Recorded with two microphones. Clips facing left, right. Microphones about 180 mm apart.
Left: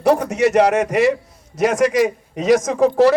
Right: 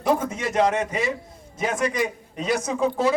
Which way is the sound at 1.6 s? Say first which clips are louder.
Left 9 dB; 85° left.